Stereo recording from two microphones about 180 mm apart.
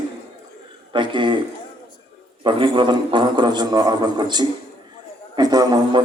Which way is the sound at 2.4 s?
25° right (ahead or behind).